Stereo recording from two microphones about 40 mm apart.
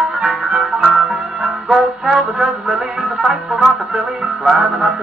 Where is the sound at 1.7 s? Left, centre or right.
Right.